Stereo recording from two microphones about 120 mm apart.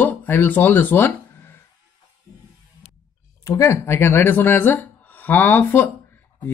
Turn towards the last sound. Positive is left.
turn(degrees=15)  # may be behind; listen again after turning